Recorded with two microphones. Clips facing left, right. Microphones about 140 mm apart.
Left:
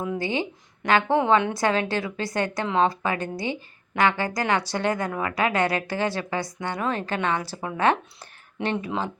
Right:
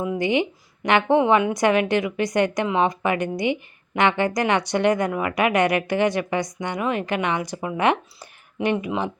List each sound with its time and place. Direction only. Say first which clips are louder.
0.2 s a woman's voice: right 5 dB; 20° right (ahead or behind)